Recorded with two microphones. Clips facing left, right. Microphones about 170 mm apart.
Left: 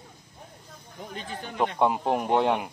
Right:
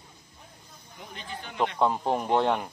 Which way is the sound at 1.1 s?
40° left (ahead or behind).